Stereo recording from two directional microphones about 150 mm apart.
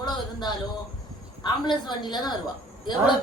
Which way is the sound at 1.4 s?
30° left (ahead or behind).